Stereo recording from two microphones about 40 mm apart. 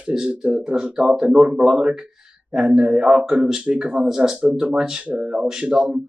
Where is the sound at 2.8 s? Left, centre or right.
Right.